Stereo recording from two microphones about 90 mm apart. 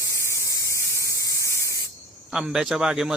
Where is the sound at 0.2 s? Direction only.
30° left (ahead or behind).